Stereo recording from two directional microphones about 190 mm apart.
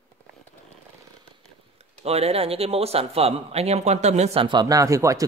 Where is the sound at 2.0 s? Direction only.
35° right (ahead or behind).